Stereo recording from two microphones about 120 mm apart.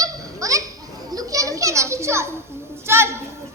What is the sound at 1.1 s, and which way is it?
Children playing, 30° right (ahead or behind).